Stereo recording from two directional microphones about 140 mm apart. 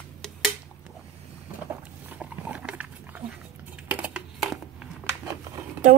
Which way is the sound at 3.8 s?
10° right (ahead or behind).